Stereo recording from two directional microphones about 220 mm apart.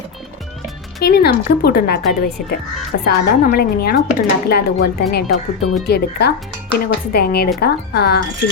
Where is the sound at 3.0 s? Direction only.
45° left (ahead or behind).